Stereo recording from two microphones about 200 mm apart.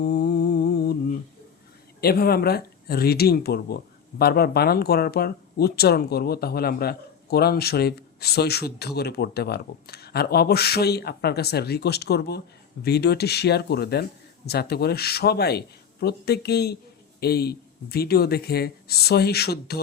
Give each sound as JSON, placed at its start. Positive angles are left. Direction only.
{"t": 0.0, "sound": "mantra", "side_deg": 55}
{"t": 2.0, "sound": "speech", "side_deg": 50}